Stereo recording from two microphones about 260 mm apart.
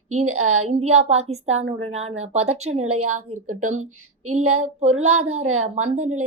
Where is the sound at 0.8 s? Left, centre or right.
Right.